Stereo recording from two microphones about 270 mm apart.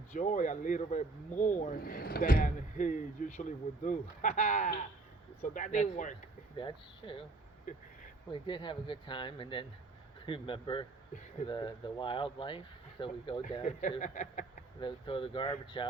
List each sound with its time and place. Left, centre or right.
0.1 s speech: left
6.6 s speech: centre